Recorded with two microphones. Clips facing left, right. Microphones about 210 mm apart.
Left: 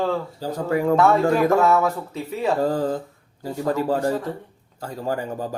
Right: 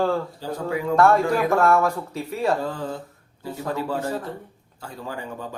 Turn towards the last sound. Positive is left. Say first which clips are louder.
# left 6 dB
turn(degrees=40)  # may be behind; listen again after turning